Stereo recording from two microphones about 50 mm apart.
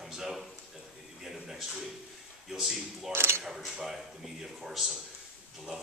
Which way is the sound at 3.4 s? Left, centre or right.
Centre.